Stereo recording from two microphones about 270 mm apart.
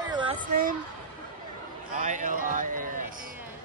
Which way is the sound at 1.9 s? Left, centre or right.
Right.